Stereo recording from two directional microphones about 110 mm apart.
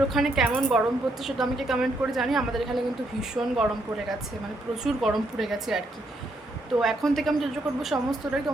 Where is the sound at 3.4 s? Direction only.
15° right (ahead or behind).